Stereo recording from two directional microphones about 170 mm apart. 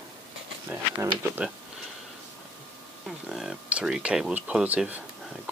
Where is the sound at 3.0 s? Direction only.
Centre (ahead or behind).